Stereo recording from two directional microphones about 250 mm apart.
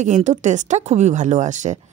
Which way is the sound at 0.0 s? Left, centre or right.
Right.